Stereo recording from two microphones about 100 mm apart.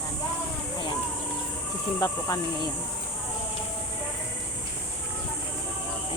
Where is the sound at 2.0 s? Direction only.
40° left (ahead or behind).